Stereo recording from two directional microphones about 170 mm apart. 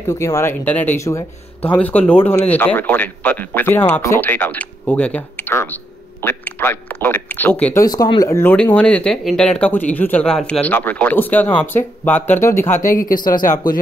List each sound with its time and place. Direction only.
0.0 s speech: 15° left (ahead or behind)
7.8 s speech: 25° left (ahead or behind)
12.8 s speech: 50° left (ahead or behind)